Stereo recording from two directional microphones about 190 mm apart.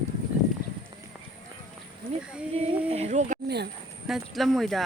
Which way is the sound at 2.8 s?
35° right (ahead or behind).